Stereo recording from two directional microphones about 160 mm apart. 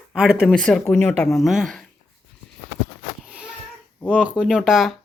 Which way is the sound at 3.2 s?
5° right (ahead or behind).